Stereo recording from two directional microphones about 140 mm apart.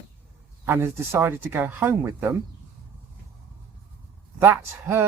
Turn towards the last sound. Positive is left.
turn(degrees=-15)  # may be behind; listen again after turning